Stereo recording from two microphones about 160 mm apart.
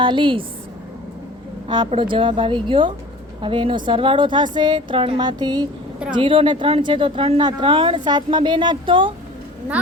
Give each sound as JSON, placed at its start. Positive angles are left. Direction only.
{"t": 0.0, "sound": "a woman's voice", "side_deg": -30}
{"t": 1.6, "sound": "a woman's voice", "side_deg": -25}